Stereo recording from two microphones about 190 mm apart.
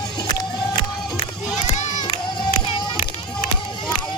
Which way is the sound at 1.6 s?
40° left (ahead or behind).